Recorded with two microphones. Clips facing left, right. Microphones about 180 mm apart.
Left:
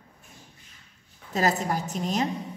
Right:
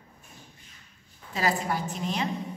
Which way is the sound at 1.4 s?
40° left (ahead or behind).